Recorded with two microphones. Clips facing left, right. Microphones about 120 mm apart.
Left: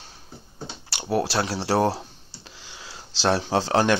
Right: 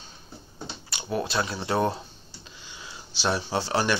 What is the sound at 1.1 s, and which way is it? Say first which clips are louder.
Speech: left 4 dB; 75° left (ahead or behind).